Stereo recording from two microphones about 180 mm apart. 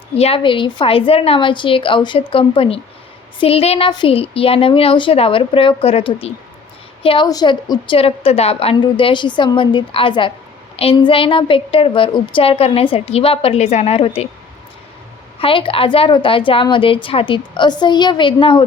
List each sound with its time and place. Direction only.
0.1 s a woman's voice: 35° left (ahead or behind)
15.4 s a woman's voice: 30° left (ahead or behind)